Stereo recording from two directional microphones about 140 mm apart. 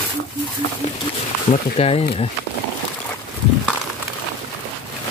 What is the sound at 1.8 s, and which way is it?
Speech, 45° left (ahead or behind).